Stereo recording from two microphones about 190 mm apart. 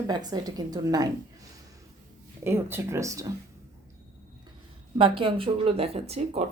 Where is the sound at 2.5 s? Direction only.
10° right (ahead or behind).